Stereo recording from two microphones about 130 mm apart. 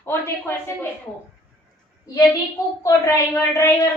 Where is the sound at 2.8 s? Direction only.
25° left (ahead or behind).